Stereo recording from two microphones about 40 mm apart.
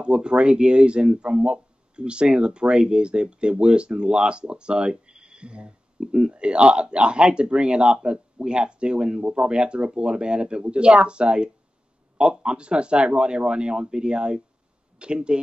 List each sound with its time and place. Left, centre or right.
0.0 s speech: right